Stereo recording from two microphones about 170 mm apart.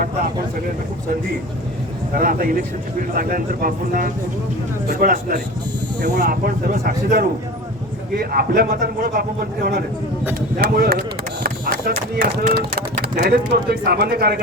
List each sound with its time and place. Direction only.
2.1 s speech: 55° right (ahead or behind)